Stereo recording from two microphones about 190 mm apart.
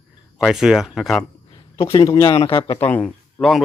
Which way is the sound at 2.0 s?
15° left (ahead or behind).